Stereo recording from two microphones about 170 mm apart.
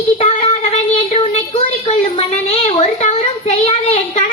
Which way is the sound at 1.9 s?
35° left (ahead or behind).